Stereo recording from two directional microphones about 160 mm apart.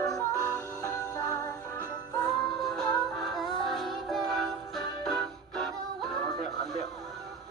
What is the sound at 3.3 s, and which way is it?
Music, centre (ahead or behind).